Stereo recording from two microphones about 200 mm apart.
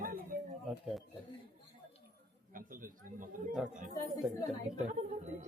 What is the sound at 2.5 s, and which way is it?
Speech, 45° right (ahead or behind).